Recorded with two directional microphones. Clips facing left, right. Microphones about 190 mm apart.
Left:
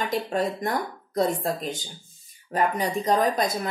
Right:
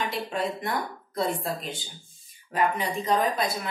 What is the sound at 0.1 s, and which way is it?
A woman's voice, 40° left (ahead or behind).